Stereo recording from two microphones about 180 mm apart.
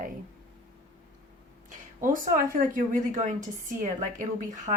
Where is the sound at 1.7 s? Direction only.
50° right (ahead or behind).